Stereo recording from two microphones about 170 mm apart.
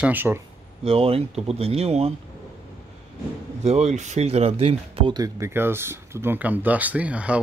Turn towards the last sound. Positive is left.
turn(degrees=-5)  # may be behind; listen again after turning